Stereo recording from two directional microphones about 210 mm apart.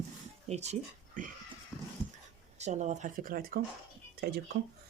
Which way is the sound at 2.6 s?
35° right (ahead or behind).